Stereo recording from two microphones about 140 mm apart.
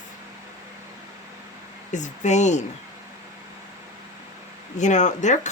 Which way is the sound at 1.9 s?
60° left (ahead or behind).